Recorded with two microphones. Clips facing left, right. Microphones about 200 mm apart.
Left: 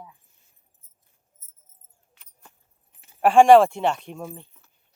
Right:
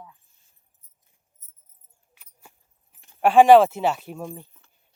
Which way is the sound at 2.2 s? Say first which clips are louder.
Right 1 dB; 10° right (ahead or behind).